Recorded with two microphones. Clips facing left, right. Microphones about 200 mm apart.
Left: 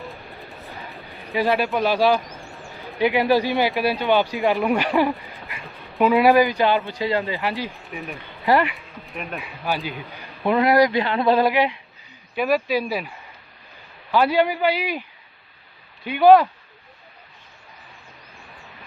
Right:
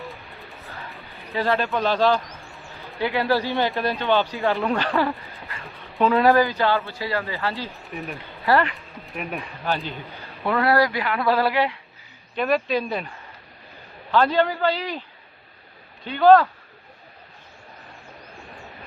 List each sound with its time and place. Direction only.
0.0 s music: centre (ahead or behind)
1.3 s speech: 15° left (ahead or behind)
7.9 s speech: centre (ahead or behind)
8.4 s speech: 15° left (ahead or behind)
9.0 s speech: centre (ahead or behind); by 11.8 s 15° left (ahead or behind)
12.3 s speech: 5° left (ahead or behind)
14.1 s speech: 10° left (ahead or behind)
16.0 s speech: 10° left (ahead or behind)